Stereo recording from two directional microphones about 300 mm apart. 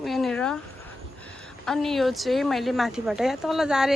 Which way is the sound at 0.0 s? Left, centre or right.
Centre.